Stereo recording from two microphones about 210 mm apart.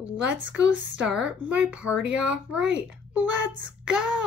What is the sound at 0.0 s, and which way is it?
Speech, 5° right (ahead or behind).